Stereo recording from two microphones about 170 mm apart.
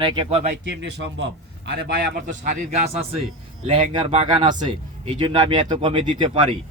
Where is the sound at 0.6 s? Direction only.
90° right.